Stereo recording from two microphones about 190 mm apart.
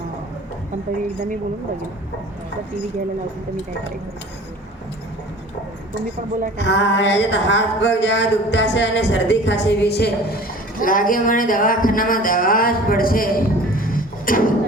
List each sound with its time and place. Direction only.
6.6 s speech: 65° left (ahead or behind); by 14.5 s 45° left (ahead or behind)